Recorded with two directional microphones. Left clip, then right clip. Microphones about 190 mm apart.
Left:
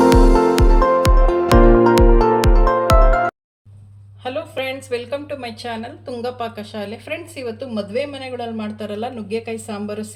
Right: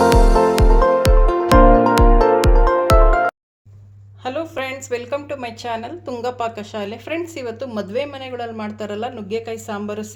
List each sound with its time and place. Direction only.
0.0 s music: centre (ahead or behind)
4.2 s a woman's voice: 40° right (ahead or behind)